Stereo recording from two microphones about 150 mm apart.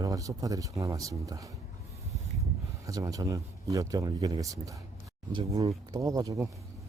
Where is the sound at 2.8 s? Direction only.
20° right (ahead or behind).